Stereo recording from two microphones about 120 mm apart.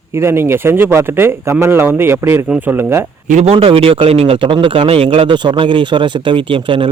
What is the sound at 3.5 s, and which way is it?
A man's voice, 50° right (ahead or behind).